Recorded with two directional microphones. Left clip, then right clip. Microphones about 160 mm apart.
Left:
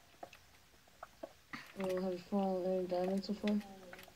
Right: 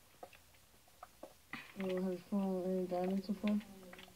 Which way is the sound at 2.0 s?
10° left (ahead or behind).